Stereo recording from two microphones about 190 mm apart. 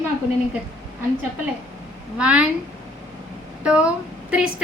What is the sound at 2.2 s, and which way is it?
Speech, 5° right (ahead or behind).